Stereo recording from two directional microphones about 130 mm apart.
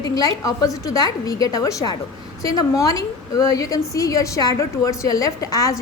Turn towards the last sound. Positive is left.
turn(degrees=25)  # may be behind; listen again after turning